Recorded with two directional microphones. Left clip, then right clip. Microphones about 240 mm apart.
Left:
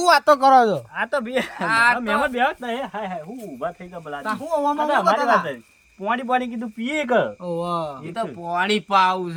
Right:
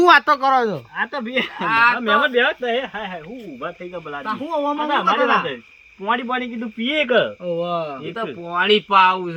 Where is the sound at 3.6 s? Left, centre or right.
Left.